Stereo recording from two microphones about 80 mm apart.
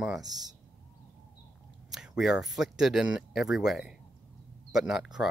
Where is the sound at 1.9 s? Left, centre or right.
Centre.